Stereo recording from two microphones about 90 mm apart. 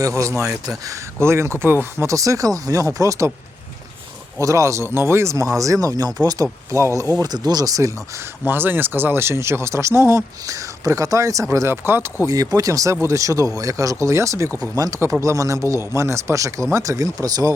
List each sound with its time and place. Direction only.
0.0 s speech: 35° right (ahead or behind)
0.4 s speech: 10° right (ahead or behind)
0.9 s speech: 30° right (ahead or behind)
4.4 s speech: 35° right (ahead or behind)
7.2 s speech: 50° right (ahead or behind)
8.4 s speech: 25° right (ahead or behind)
12.2 s speech: 40° right (ahead or behind)